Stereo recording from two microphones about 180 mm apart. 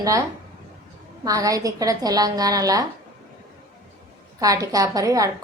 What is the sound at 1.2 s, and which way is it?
A woman's voice, 20° right (ahead or behind).